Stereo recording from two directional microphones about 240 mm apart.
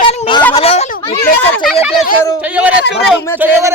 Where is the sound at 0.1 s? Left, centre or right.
Centre.